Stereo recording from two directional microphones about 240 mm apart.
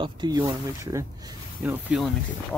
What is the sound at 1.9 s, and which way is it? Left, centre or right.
Speech, centre.